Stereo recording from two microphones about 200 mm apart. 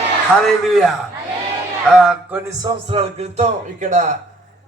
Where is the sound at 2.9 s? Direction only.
30° right (ahead or behind).